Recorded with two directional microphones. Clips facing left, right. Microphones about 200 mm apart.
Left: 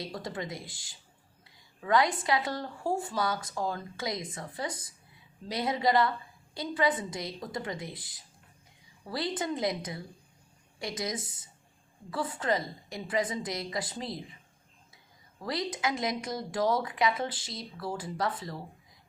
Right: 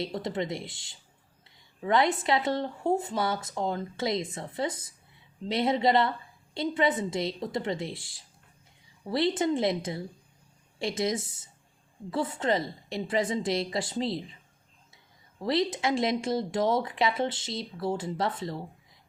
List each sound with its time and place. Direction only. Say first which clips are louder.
0.0 s speech: right 6 dB; 25° right (ahead or behind)
15.4 s speech: right 6 dB; 25° right (ahead or behind)